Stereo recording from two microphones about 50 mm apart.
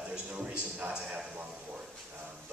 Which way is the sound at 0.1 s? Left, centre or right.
Right.